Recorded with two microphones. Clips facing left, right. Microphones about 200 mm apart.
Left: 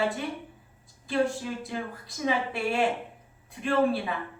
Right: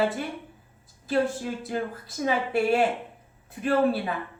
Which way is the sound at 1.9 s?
Centre (ahead or behind).